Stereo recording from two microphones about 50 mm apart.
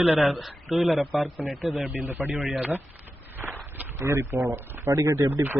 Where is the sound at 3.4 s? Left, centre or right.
Right.